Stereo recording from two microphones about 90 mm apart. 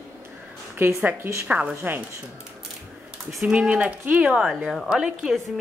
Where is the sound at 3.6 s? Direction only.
15° right (ahead or behind).